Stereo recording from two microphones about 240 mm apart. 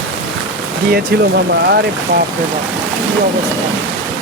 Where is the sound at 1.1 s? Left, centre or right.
Right.